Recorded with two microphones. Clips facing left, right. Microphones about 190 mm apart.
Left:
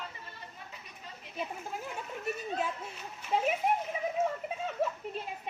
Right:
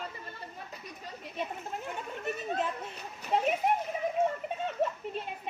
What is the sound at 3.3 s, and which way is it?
Splash, centre (ahead or behind).